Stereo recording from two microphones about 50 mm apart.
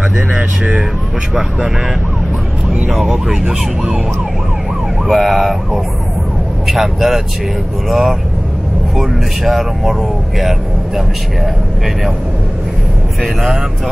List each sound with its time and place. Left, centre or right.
0.3 s speech: right
2.7 s a sound: right
3.1 s speech: centre
5.0 s speech: centre
13.2 s speech: centre